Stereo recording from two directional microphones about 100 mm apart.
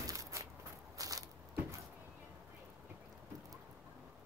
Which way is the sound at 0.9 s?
35° right (ahead or behind).